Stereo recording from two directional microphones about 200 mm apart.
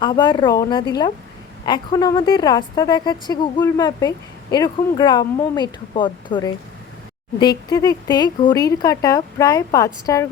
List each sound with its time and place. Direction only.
0.0 s a woman's voice: 20° left (ahead or behind)